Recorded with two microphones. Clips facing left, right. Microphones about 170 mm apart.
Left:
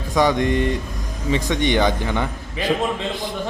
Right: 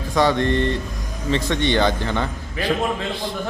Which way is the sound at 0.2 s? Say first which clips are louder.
Even; 15° left (ahead or behind).